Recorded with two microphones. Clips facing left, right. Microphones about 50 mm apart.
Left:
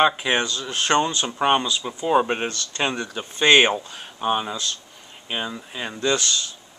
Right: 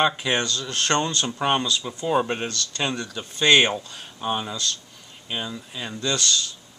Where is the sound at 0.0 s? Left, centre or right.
Centre.